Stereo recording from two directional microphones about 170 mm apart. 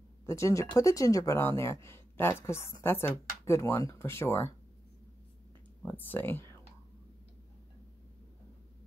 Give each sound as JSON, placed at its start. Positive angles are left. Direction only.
{"t": 0.3, "sound": "speech", "side_deg": 15}
{"t": 5.8, "sound": "speech", "side_deg": 10}